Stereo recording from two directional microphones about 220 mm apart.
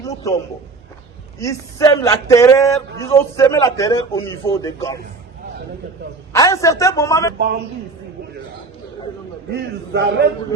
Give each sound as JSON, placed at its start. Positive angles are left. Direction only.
{"t": 0.0, "sound": "a man's voice", "side_deg": 15}
{"t": 1.4, "sound": "a man's voice", "side_deg": 15}
{"t": 6.3, "sound": "a man's voice", "side_deg": 15}
{"t": 9.5, "sound": "a man's voice", "side_deg": -50}